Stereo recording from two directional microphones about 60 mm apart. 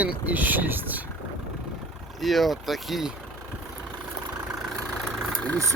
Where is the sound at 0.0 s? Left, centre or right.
Right.